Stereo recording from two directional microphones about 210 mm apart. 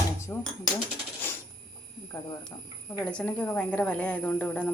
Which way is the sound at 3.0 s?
5° left (ahead or behind).